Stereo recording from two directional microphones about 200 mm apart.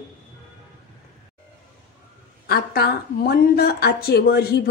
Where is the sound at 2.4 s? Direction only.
50° left (ahead or behind).